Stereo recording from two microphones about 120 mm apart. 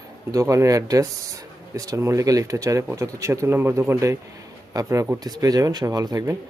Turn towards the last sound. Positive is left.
turn(degrees=-30)  # may be behind; listen again after turning